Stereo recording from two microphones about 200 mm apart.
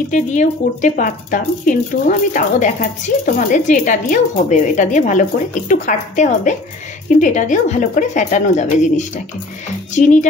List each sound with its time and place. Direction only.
0.1 s speech: 40° left (ahead or behind)